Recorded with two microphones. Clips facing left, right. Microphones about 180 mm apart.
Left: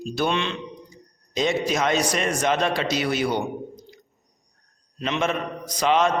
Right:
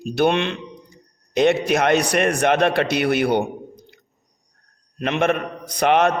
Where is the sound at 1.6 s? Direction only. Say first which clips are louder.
Right 4 dB; 60° right (ahead or behind).